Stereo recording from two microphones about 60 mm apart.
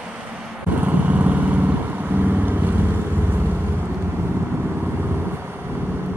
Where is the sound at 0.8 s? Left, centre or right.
Right.